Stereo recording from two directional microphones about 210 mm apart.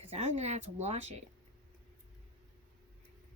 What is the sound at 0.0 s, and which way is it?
Speech, 30° right (ahead or behind).